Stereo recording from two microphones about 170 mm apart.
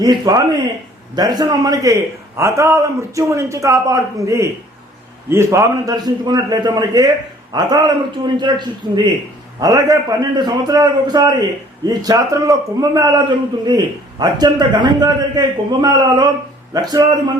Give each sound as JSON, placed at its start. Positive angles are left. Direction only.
{"t": 0.0, "sound": "a man's voice", "side_deg": -25}